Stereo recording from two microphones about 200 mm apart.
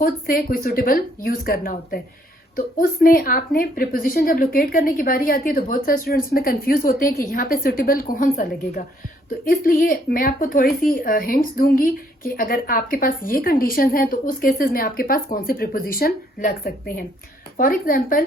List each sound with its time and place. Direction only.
0.0 s a woman's voice: 45° left (ahead or behind)